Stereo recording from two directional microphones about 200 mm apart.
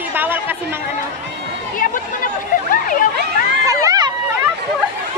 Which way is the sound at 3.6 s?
20° right (ahead or behind).